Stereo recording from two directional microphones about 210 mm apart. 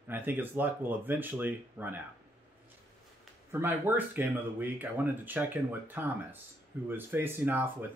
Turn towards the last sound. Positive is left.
turn(degrees=-10)  # may be behind; listen again after turning